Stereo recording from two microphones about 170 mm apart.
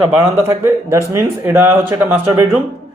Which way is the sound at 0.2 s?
15° right (ahead or behind).